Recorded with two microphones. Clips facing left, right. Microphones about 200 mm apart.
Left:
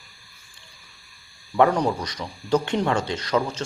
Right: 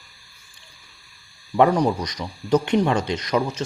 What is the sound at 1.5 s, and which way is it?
Speech, 15° right (ahead or behind).